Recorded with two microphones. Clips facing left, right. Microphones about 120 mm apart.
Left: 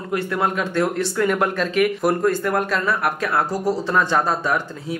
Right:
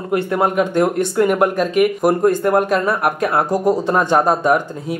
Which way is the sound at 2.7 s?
50° right (ahead or behind).